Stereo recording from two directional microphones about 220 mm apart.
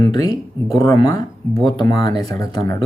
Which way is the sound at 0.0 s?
20° left (ahead or behind).